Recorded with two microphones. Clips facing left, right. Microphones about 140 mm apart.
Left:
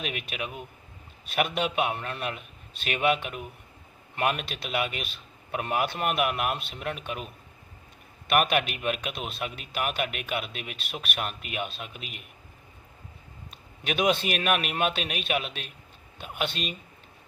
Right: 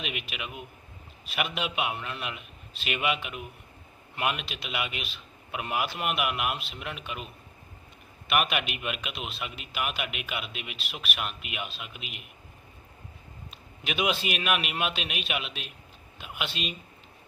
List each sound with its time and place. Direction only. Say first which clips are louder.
0.0 s a man's voice: left 3 dB; 45° left (ahead or behind)
5.1 s a sound: left 4 dB; 45° left (ahead or behind)
6.0 s speech: left 3 dB; 40° left (ahead or behind)
8.3 s a man's voice: left 4 dB; 45° left (ahead or behind)
13.8 s a man's voice: left 4 dB; 40° left (ahead or behind)